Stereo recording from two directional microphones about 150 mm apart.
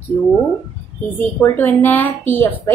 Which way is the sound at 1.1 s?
15° left (ahead or behind).